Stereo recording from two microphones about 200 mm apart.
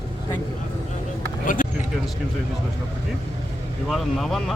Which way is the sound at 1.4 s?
40° left (ahead or behind).